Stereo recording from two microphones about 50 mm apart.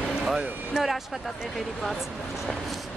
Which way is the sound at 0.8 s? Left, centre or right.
Centre.